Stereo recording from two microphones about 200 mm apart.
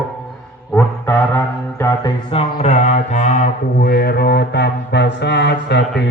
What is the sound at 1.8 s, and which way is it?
Music, 15° left (ahead or behind).